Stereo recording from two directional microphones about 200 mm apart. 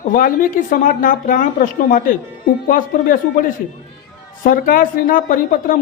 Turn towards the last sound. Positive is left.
turn(degrees=45)  # may be behind; listen again after turning